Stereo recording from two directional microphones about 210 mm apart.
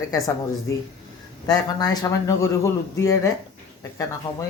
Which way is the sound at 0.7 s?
15° left (ahead or behind).